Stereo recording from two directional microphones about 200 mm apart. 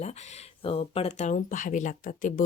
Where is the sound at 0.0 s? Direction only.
35° left (ahead or behind).